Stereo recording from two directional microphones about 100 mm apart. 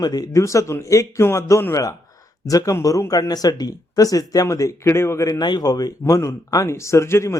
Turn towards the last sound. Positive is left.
turn(degrees=30)  # may be behind; listen again after turning